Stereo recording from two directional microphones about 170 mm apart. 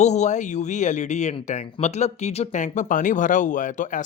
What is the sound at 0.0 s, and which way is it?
A man's voice, 40° left (ahead or behind).